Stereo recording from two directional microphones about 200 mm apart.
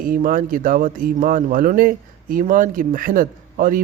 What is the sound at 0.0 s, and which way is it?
Speech, 45° right (ahead or behind).